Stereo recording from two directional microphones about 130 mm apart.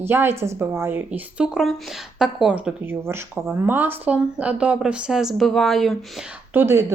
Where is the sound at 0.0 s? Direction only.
15° right (ahead or behind); by 6.0 s centre (ahead or behind).